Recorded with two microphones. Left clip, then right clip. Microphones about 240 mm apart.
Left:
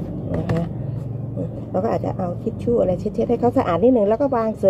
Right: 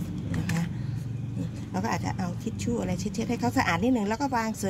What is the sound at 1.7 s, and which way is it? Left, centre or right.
Speech, right.